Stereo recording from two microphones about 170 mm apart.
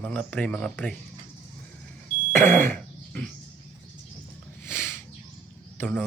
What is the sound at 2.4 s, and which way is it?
Throat clearing, 45° right (ahead or behind).